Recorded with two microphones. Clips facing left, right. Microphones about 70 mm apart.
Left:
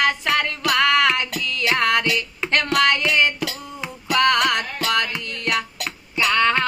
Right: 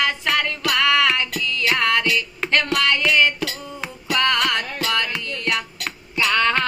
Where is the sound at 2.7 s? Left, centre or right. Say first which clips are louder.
Left 2 dB; left.